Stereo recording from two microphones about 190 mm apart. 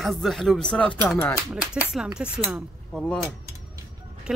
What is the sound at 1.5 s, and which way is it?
Speech, 5° right (ahead or behind).